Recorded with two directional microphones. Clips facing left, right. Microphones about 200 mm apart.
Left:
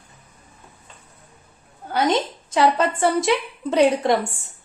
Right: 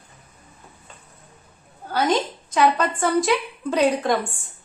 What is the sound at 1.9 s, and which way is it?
A woman's voice, 20° left (ahead or behind).